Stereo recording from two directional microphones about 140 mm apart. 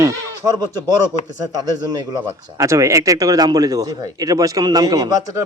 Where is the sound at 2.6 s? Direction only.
20° right (ahead or behind).